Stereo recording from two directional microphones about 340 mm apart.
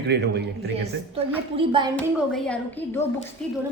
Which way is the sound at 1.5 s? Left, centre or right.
Centre.